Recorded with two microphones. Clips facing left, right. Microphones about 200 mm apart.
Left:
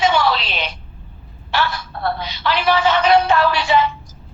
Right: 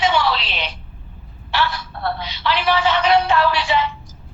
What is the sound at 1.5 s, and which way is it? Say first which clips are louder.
Speech: left 1 dB; 45° left (ahead or behind).